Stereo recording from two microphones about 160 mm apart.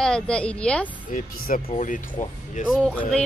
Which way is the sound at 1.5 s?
50° left (ahead or behind).